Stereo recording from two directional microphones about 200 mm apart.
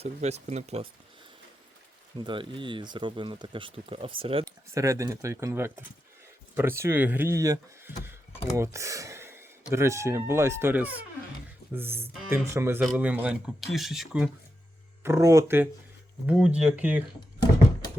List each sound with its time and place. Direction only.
0.0 s speech: 30° right (ahead or behind)
2.1 s speech: 25° right (ahead or behind)
4.7 s speech: 15° right (ahead or behind)
15.0 s speech: 15° right (ahead or behind)